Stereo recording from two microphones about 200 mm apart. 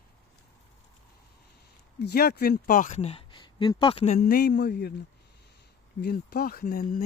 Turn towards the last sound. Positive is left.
turn(degrees=45)  # may be behind; listen again after turning